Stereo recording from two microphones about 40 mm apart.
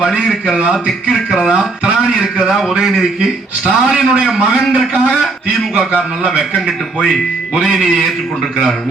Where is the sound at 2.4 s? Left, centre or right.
Centre.